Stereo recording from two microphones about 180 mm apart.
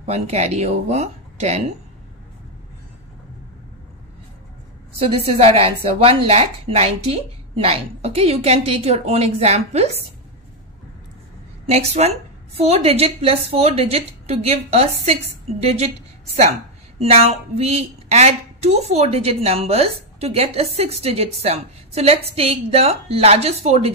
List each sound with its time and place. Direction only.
0.0 s speech: 40° right (ahead or behind)
4.9 s a woman's voice: 35° right (ahead or behind)
11.7 s a woman's voice: 35° right (ahead or behind)
17.0 s a woman's voice: 35° right (ahead or behind)